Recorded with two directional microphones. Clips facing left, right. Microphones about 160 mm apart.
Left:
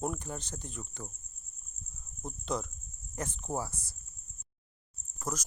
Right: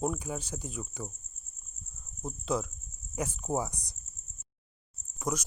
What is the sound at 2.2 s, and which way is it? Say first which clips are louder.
Speech: right 3 dB; 5° right (ahead or behind).